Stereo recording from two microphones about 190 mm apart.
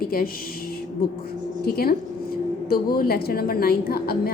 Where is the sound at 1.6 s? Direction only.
55° left (ahead or behind).